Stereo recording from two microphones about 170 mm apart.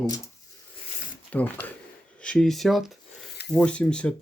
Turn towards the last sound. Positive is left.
turn(degrees=5)  # may be behind; listen again after turning